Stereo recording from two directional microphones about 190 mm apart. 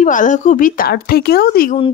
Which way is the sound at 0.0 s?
40° left (ahead or behind).